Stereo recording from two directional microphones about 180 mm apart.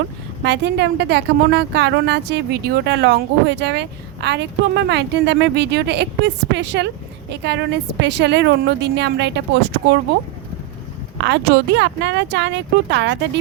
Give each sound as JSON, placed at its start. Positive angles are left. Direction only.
{"t": 0.4, "sound": "a woman's voice", "side_deg": -75}
{"t": 11.2, "sound": "speech", "side_deg": -75}